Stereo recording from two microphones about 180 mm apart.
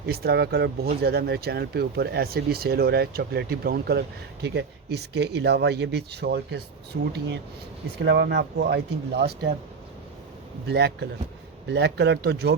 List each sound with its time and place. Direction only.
0.0 s speech: 60° right (ahead or behind)
10.7 s speech: 65° right (ahead or behind)